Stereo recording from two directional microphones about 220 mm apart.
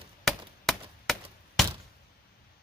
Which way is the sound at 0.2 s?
Centre (ahead or behind).